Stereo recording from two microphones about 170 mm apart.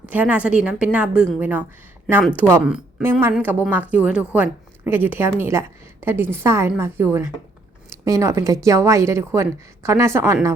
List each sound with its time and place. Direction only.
0.1 s a woman's voice: 10° right (ahead or behind)